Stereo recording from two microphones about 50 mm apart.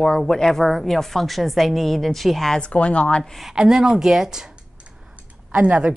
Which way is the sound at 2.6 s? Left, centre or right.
Left.